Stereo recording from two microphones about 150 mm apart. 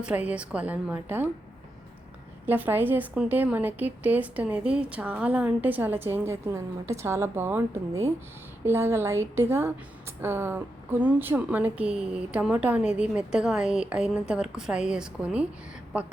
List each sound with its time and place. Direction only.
0.0 s a woman's voice: 10° right (ahead or behind)
2.5 s a woman's voice: 15° right (ahead or behind)